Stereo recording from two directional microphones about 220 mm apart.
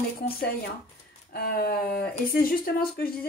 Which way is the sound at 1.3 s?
45° left (ahead or behind).